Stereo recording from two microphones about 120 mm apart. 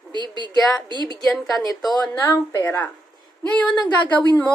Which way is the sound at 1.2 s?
Centre (ahead or behind).